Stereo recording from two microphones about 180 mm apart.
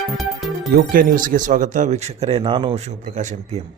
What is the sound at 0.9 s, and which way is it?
Speech, 50° right (ahead or behind).